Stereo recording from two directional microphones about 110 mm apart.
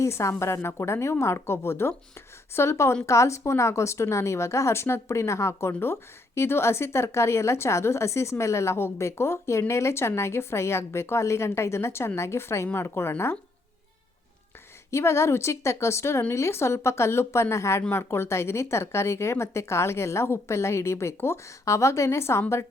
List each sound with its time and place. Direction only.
0.0 s speech: 25° left (ahead or behind)
14.8 s speech: 25° left (ahead or behind)